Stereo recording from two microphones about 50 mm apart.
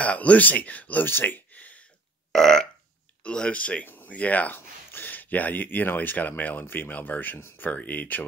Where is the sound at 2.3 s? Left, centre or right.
Centre.